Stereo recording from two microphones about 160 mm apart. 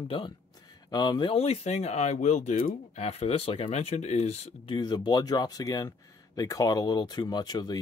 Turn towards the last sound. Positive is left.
turn(degrees=25)  # may be behind; listen again after turning